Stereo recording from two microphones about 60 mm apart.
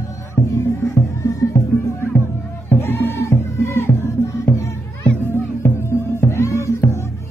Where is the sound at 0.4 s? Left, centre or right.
Left.